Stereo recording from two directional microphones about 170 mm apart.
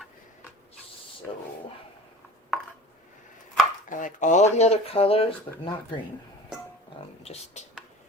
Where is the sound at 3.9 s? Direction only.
50° left (ahead or behind); by 6.0 s 35° left (ahead or behind).